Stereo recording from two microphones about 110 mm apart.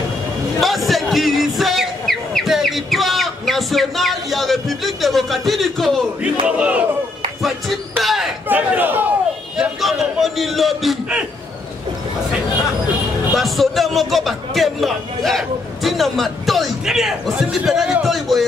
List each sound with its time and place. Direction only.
0.6 s music: centre (ahead or behind)
6.4 s speech: 10° right (ahead or behind)
8.0 s a sound: centre (ahead or behind)
8.5 s a sound: 15° right (ahead or behind)
9.6 s a man's voice: centre (ahead or behind)
13.3 s a man's voice: centre (ahead or behind)
18.0 s music: centre (ahead or behind)